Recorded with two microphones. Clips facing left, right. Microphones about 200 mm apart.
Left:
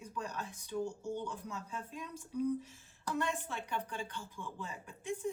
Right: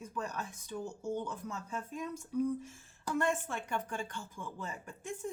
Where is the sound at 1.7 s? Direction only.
45° right (ahead or behind).